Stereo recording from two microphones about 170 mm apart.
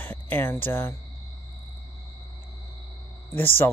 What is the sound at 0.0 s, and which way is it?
Speech, 10° left (ahead or behind).